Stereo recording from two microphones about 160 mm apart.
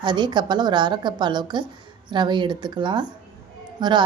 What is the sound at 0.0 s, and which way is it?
A woman's voice, 30° right (ahead or behind).